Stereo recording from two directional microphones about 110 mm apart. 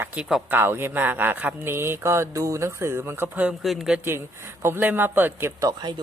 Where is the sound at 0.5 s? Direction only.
20° right (ahead or behind).